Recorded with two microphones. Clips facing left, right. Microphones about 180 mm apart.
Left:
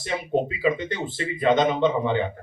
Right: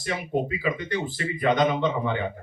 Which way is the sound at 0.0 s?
25° left (ahead or behind).